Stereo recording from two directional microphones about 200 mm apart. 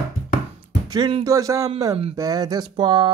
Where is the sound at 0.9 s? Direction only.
20° right (ahead or behind).